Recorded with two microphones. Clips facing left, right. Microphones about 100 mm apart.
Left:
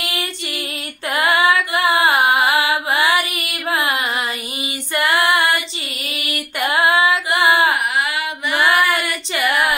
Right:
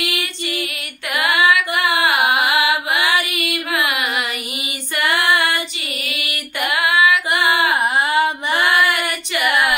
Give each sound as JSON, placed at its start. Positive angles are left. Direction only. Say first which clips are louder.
{"t": 0.0, "sound": "female singing", "louder": "right 1 dB", "side_deg": 30}
{"t": 1.1, "sound": "music", "louder": "left 1 dB", "side_deg": 30}
{"t": 4.9, "sound": "female singing", "louder": "left 1 dB", "side_deg": 25}
{"t": 6.6, "sound": "female singing", "louder": "left 1 dB", "side_deg": 30}
{"t": 7.7, "sound": "a sound", "louder": "right 3 dB", "side_deg": -30}
{"t": 8.5, "sound": "child singing", "louder": "left 2 dB", "side_deg": 30}
{"t": 9.3, "sound": "female singing", "louder": "even", "side_deg": 25}